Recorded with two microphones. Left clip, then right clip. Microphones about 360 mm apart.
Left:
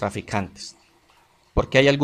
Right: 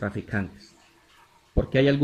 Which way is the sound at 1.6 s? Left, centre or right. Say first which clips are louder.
Left 5 dB; centre.